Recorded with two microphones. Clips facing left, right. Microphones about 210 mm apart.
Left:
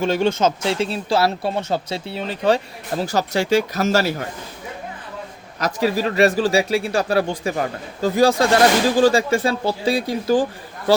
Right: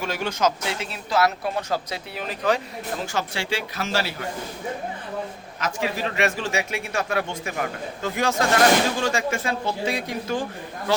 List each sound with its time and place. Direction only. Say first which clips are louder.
0.0 s speech: left 6 dB; 25° left (ahead or behind); by 4.1 s 40° left (ahead or behind)
5.5 s speech: left 7 dB; 40° left (ahead or behind)